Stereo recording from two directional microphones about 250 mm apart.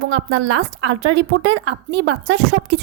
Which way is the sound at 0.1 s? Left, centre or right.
Right.